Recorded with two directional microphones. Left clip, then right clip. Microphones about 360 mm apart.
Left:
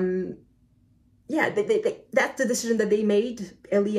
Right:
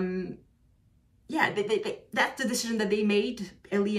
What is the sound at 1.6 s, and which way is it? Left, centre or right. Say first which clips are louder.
Speech: left 5 dB; centre.